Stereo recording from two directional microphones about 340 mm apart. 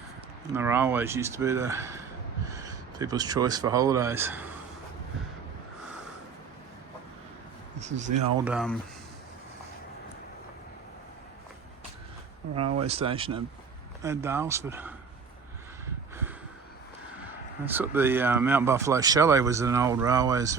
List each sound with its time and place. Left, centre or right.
0.5 s speech: centre
7.8 s speech: centre
8.4 s speech: centre
12.7 s speech: centre
17.7 s speech: centre